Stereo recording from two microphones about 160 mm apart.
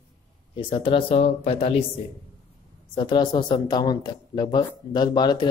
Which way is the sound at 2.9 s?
30° left (ahead or behind).